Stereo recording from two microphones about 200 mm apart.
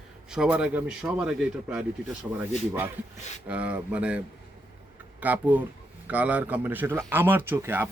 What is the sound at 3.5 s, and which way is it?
A man's voice, 5° right (ahead or behind).